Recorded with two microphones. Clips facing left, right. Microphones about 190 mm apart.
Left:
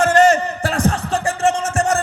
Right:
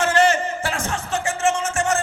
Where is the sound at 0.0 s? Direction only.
40° left (ahead or behind).